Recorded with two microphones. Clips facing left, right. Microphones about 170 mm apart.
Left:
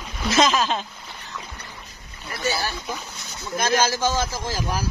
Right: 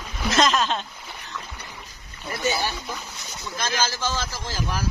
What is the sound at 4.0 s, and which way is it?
Speech, 15° left (ahead or behind).